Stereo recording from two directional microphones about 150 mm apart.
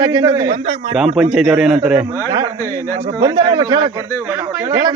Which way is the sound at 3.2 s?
30° right (ahead or behind).